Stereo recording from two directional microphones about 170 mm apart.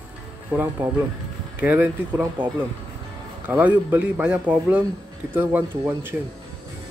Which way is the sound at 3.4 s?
10° right (ahead or behind).